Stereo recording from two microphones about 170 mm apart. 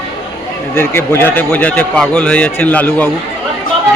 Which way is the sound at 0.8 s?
15° left (ahead or behind).